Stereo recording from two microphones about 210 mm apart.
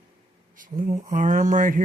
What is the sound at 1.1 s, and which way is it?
Speech, 35° right (ahead or behind).